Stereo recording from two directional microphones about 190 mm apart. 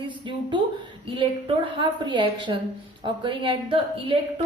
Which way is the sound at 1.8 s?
25° right (ahead or behind).